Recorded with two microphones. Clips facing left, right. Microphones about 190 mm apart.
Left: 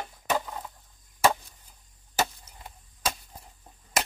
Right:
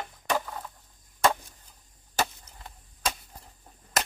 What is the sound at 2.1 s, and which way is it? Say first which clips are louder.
Chop: left 1 dB; 10° left (ahead or behind).